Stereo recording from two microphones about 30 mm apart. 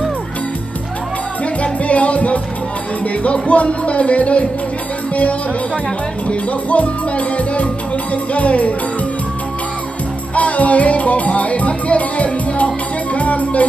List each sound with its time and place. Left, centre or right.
1.6 s music: left
6.2 s music: left
10.3 s music: left